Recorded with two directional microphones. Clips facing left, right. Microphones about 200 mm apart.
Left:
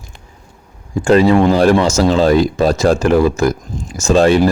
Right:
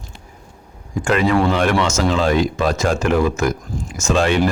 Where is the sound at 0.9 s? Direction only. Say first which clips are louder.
Left 6 dB; 30° left (ahead or behind).